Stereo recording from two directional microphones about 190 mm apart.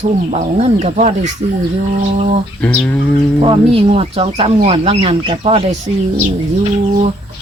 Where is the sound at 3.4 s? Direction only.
30° right (ahead or behind).